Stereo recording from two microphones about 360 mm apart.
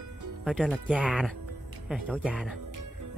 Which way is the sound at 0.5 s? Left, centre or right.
Centre.